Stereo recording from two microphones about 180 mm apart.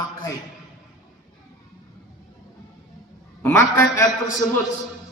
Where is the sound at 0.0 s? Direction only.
20° left (ahead or behind).